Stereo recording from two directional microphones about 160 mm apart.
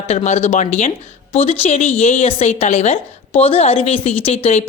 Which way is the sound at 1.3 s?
40° left (ahead or behind).